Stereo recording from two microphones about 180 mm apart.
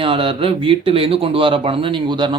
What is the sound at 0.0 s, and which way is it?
Speech, 30° right (ahead or behind).